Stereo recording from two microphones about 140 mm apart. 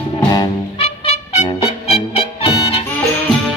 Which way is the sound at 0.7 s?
45° left (ahead or behind).